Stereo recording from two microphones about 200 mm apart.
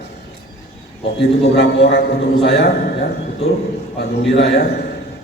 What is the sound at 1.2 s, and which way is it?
A man's voice, 55° left (ahead or behind).